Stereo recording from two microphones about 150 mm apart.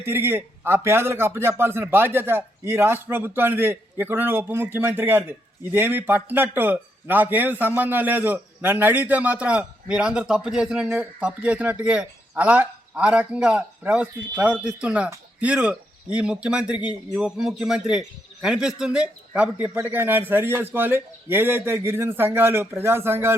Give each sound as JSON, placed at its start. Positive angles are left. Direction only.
{"t": 0.0, "sound": "a man's voice", "side_deg": -15}